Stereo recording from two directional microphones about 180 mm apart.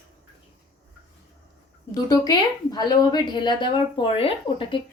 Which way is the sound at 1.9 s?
20° left (ahead or behind).